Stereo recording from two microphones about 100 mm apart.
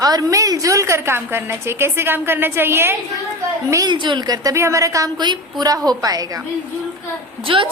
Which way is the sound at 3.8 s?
50° right (ahead or behind).